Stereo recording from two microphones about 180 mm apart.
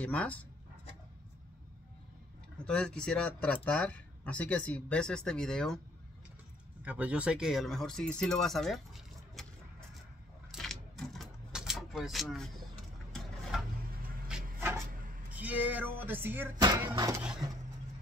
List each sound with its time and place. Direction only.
0.0 s speech: 5° left (ahead or behind)
2.6 s speech: 5° left (ahead or behind)
6.8 s speech: 10° right (ahead or behind)
10.5 s a sound: centre (ahead or behind)
15.3 s speech: 10° right (ahead or behind)
16.6 s speech: 20° right (ahead or behind)